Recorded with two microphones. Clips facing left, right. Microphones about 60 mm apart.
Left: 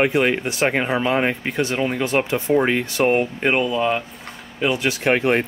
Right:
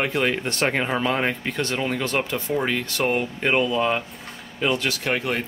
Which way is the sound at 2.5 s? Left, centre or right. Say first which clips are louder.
Left 8 dB; left.